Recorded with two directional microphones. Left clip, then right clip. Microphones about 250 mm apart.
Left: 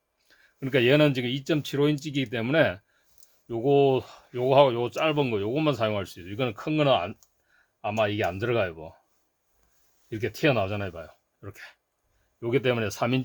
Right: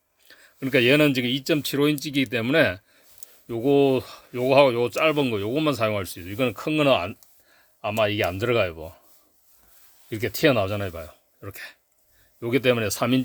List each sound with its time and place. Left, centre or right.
0.3 s speech: right
10.1 s speech: right